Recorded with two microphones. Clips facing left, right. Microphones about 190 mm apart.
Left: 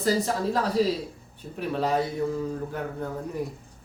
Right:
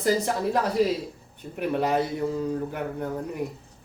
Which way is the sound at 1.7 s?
20° right (ahead or behind).